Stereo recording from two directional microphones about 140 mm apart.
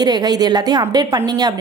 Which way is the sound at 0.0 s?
30° right (ahead or behind).